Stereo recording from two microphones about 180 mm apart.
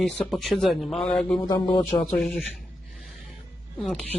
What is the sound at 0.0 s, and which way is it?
Speech, centre (ahead or behind).